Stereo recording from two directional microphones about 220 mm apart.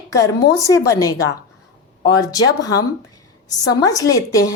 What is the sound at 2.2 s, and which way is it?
A woman's voice, 15° left (ahead or behind).